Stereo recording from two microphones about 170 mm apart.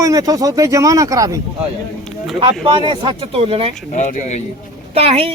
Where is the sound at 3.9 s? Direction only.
45° left (ahead or behind).